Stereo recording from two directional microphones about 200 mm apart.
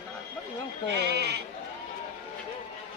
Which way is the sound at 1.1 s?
55° right (ahead or behind).